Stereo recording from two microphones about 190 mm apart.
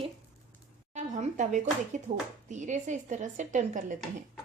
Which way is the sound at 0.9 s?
40° right (ahead or behind).